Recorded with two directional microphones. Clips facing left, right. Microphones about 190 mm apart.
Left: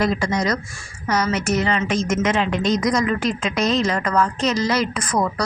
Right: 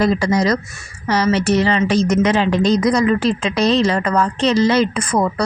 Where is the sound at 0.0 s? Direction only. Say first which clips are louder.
Right 5 dB; 35° right (ahead or behind).